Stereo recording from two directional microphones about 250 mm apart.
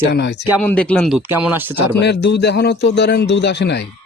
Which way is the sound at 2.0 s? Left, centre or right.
Left.